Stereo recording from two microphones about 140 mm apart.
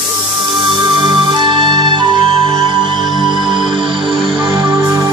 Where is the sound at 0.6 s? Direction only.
35° right (ahead or behind).